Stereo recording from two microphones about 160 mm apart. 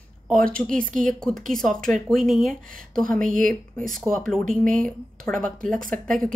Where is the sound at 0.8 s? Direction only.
55° right (ahead or behind).